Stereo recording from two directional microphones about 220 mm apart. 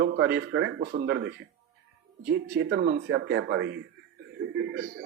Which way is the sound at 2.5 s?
45° right (ahead or behind).